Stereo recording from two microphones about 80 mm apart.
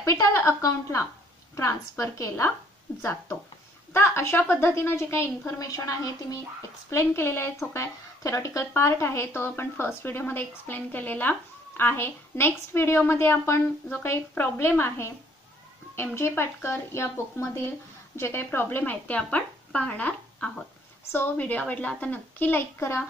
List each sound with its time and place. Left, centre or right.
0.0 s a woman's voice: left